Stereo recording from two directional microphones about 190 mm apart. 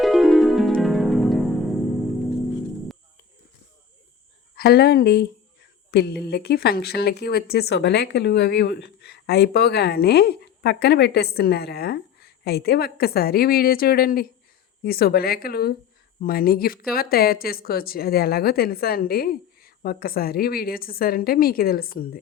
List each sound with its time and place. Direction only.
0.0 s music: centre (ahead or behind)
4.5 s speech: 55° left (ahead or behind)